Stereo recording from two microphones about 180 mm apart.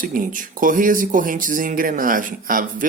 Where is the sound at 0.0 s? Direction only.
50° right (ahead or behind).